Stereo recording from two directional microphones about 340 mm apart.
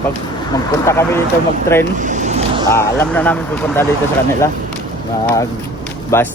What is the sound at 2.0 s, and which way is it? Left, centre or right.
Vehicle, right.